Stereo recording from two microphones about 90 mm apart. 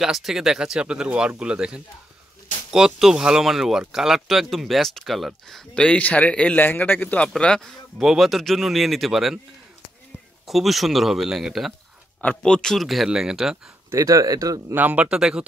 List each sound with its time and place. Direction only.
0.0 s speech: 5° right (ahead or behind)
5.8 s a man's voice: 15° left (ahead or behind)
8.0 s speech: 5° right (ahead or behind)
10.4 s speech: centre (ahead or behind)
12.2 s speech: 15° left (ahead or behind); by 13.6 s 5° right (ahead or behind)
13.8 s speech: 40° right (ahead or behind)
14.7 s speech: 20° right (ahead or behind)